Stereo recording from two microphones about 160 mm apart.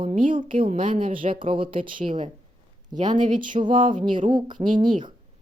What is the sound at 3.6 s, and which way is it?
Speech, 30° right (ahead or behind).